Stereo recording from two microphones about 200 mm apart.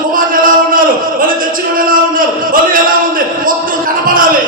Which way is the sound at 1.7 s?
45° right (ahead or behind).